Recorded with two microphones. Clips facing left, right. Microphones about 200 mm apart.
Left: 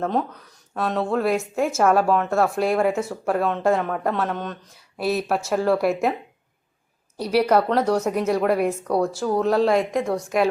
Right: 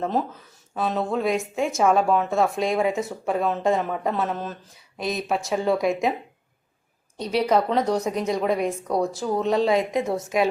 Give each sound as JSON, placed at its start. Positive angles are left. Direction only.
{"t": 0.0, "sound": "a woman's voice", "side_deg": 0}
{"t": 7.2, "sound": "a woman's voice", "side_deg": 5}
{"t": 10.0, "sound": "a woman's voice", "side_deg": -25}